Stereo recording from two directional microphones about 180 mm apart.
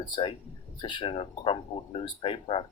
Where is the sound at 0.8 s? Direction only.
30° left (ahead or behind).